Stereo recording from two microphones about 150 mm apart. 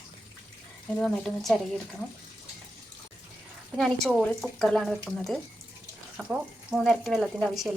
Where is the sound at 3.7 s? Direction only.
Centre (ahead or behind).